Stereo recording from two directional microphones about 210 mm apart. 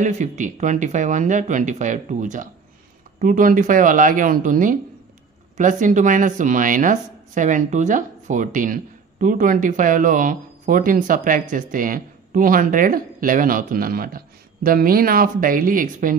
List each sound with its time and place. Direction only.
0.0 s speech: 35° right (ahead or behind)